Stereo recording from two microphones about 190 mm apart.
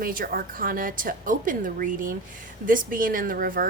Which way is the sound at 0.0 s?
50° right (ahead or behind).